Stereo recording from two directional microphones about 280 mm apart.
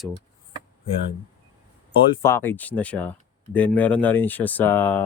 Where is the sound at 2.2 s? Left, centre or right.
Centre.